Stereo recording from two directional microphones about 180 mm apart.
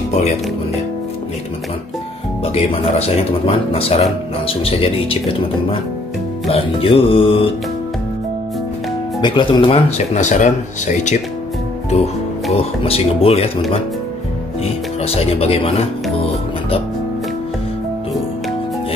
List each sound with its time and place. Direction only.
0.1 s speech: 40° left (ahead or behind)
2.4 s speech: 35° left (ahead or behind)
6.4 s speech: 30° left (ahead or behind)
9.2 s speech: 25° left (ahead or behind); by 11.1 s 40° left (ahead or behind)
12.5 s speech: 35° left (ahead or behind)
14.6 s music: 35° left (ahead or behind)